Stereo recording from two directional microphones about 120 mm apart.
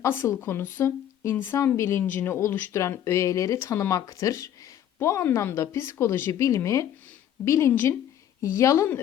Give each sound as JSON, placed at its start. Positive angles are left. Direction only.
{"t": 0.0, "sound": "speech", "side_deg": 20}